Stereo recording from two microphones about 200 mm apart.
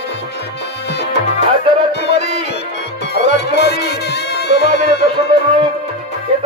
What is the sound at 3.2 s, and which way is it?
Music, 55° left (ahead or behind).